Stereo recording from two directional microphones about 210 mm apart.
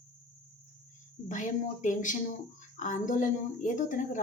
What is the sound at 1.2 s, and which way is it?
A woman's voice, 35° left (ahead or behind).